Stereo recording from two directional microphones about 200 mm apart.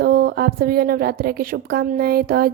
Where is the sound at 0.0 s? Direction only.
50° right (ahead or behind).